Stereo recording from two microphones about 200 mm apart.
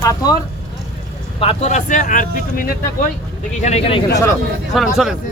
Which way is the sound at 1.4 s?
30° left (ahead or behind).